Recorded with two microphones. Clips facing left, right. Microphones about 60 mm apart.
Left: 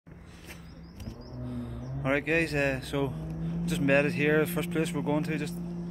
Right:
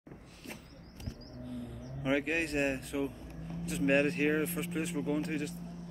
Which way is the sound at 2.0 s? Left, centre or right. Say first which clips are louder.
Left 4 dB; left.